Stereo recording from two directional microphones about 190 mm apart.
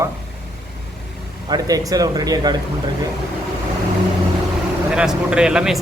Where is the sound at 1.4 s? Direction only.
20° right (ahead or behind).